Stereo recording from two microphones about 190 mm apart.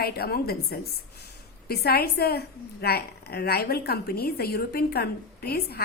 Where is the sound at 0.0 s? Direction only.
55° left (ahead or behind).